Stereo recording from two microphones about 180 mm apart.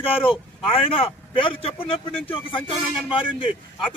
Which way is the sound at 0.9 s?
30° left (ahead or behind).